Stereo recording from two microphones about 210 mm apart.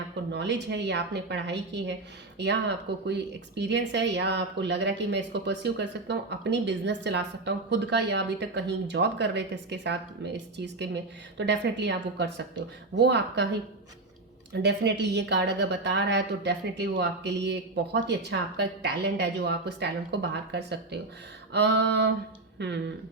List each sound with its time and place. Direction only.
0.3 s speech: 55° right (ahead or behind)
14.5 s speech: 55° right (ahead or behind)